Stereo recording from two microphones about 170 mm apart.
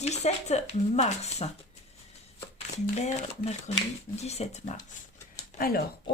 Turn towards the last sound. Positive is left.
turn(degrees=60)  # may be behind; listen again after turning